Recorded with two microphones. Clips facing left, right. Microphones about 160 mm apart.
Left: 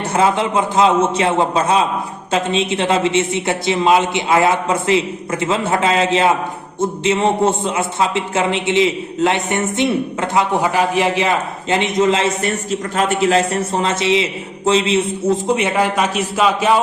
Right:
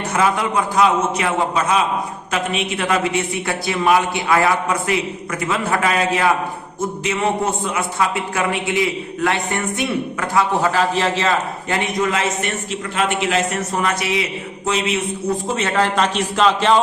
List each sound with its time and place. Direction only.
0.1 s a man's voice: 25° left (ahead or behind)
15.4 s a man's voice: 15° left (ahead or behind)